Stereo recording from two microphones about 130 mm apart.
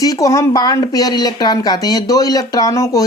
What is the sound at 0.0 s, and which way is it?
Speech, 30° left (ahead or behind).